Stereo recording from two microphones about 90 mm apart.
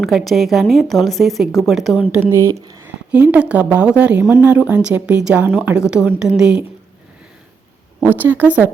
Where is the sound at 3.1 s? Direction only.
15° right (ahead or behind).